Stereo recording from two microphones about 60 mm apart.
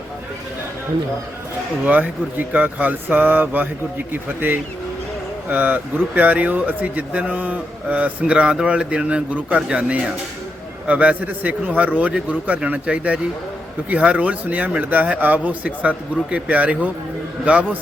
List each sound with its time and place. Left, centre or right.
1.8 s speech: right